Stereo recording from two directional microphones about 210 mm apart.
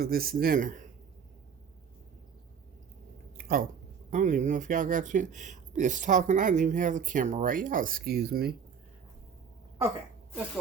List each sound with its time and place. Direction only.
0.0 s speech: 45° right (ahead or behind)
3.3 s a sound: 45° right (ahead or behind)
4.1 s speech: 35° right (ahead or behind)